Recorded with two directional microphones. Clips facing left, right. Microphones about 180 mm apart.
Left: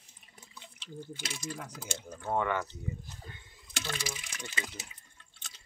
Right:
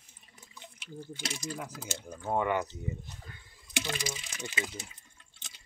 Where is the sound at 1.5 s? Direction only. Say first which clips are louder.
Right 2 dB; 5° right (ahead or behind).